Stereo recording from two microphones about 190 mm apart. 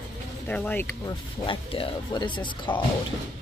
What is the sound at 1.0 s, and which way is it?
Speech, 25° left (ahead or behind).